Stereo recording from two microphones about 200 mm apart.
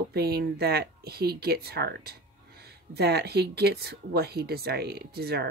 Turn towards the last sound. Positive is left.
turn(degrees=-50)  # may be behind; listen again after turning